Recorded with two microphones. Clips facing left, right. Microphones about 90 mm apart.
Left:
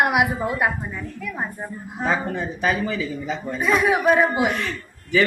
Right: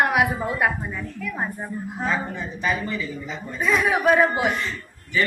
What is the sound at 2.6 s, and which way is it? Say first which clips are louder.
Speech: left 2 dB; 90° left.